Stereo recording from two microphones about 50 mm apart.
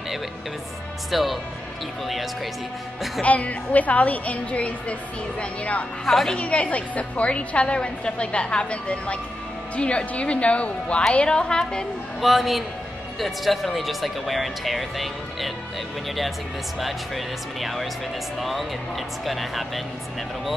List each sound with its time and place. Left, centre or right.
1.1 s speech: centre
3.2 s a woman's voice: left
6.0 s a woman's voice: centre
6.3 s a woman's voice: left
12.2 s speech: centre
16.8 s speech: centre